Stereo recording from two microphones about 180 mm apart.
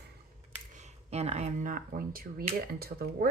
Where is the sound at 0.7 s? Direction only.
40° right (ahead or behind).